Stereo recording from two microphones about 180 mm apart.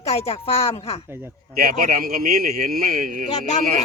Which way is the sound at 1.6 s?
50° right (ahead or behind).